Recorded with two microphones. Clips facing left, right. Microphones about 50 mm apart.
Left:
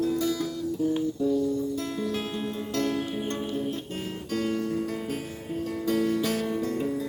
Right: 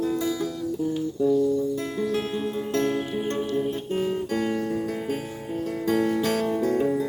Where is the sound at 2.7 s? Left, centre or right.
Right.